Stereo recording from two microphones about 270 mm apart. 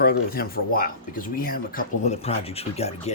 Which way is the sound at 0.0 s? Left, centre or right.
Left.